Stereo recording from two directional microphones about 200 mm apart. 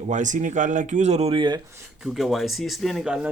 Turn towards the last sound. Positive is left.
turn(degrees=0)  # may be behind; listen again after turning